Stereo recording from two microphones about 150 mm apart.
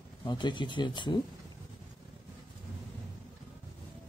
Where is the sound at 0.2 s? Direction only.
30° left (ahead or behind).